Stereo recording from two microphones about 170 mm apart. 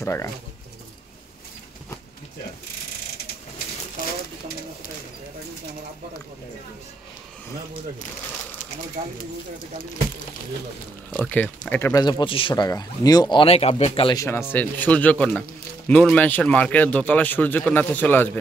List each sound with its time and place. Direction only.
0.0 s speech: 15° left (ahead or behind)
11.1 s a man's voice: 10° left (ahead or behind)
11.9 s speech: 25° left (ahead or behind)
14.1 s a man's voice: 15° left (ahead or behind)